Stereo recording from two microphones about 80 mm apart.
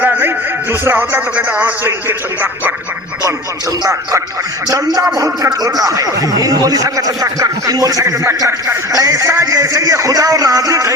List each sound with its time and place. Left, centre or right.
0.0 s a man's voice: right
3.2 s speech: right